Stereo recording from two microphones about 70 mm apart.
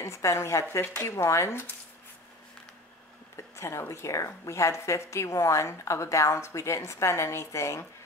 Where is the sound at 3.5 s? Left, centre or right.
Left.